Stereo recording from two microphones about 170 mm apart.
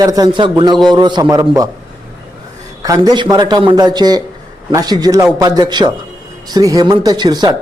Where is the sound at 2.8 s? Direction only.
25° right (ahead or behind).